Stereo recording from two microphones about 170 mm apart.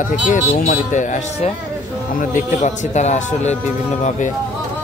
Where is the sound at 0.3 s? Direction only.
50° left (ahead or behind).